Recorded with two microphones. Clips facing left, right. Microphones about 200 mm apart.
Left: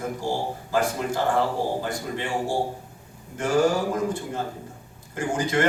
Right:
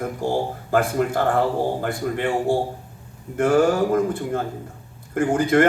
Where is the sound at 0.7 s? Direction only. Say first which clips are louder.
Right 4 dB; 55° right (ahead or behind).